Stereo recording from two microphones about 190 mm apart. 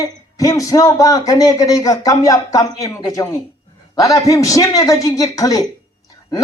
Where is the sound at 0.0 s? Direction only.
15° left (ahead or behind).